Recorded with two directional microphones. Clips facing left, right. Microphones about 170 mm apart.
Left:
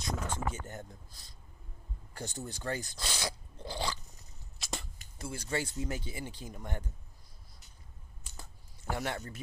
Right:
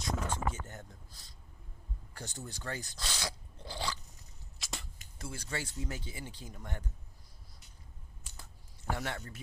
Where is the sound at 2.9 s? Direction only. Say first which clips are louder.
Left 2 dB; 15° left (ahead or behind).